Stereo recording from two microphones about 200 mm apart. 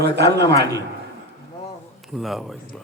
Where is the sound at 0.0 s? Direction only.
55° right (ahead or behind).